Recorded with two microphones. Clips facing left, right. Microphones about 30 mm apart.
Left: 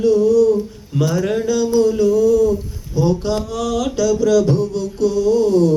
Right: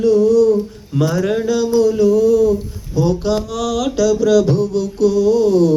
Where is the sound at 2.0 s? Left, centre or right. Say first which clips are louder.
Right 2 dB; right.